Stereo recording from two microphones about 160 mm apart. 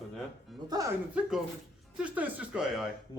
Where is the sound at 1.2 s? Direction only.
5° right (ahead or behind).